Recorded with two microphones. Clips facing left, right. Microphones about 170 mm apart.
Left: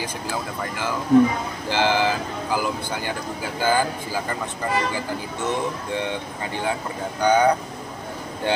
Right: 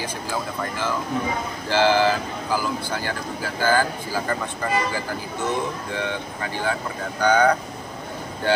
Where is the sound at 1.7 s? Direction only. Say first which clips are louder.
Right 3 dB; 15° left (ahead or behind).